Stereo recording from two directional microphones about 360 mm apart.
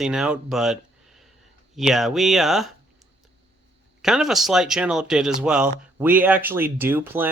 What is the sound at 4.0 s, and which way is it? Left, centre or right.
Speech, centre.